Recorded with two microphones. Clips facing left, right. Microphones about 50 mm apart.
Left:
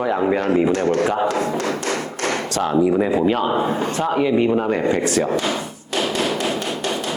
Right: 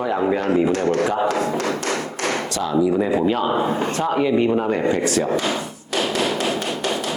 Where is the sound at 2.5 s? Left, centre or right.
Left.